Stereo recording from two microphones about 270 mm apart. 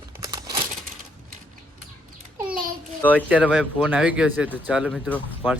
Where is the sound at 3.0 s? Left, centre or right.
Centre.